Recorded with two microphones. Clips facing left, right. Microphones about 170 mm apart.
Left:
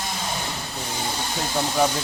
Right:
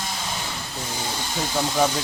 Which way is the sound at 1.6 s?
Centre (ahead or behind).